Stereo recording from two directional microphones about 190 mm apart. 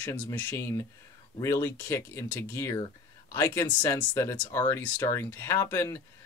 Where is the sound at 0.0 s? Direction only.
10° left (ahead or behind).